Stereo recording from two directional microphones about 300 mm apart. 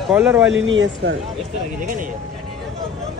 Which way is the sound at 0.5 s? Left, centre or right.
Right.